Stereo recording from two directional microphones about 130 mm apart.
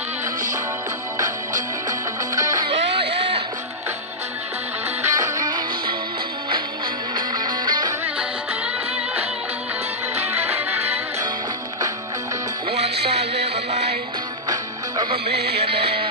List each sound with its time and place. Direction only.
5.0 s music: 25° right (ahead or behind)
7.2 s music: 35° right (ahead or behind)
13.7 s music: 60° right (ahead or behind)
15.6 s music: 50° right (ahead or behind)